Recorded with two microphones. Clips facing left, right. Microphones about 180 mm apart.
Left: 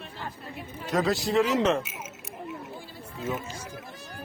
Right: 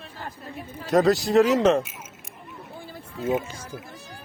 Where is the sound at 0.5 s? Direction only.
40° right (ahead or behind).